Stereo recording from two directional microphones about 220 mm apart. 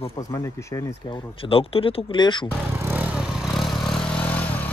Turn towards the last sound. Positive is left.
turn(degrees=5)  # may be behind; listen again after turning